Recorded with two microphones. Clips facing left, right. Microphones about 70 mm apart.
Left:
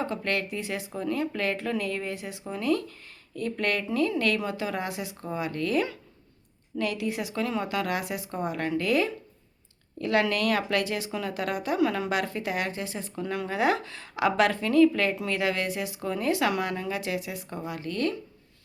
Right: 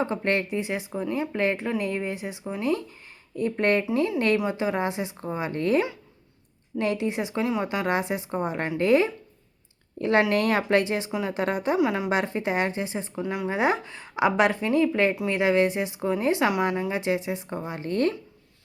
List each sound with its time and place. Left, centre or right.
0.0 s a woman's voice: right
1.3 s a woman's voice: right
11.8 s speech: centre
12.0 s a woman's voice: right
13.2 s speech: centre
13.5 s a woman's voice: right